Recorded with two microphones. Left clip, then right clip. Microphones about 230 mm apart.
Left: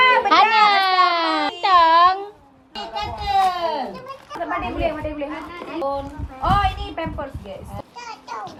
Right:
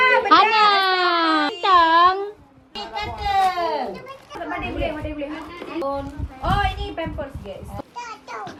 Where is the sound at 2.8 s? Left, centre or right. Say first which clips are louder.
Even; left.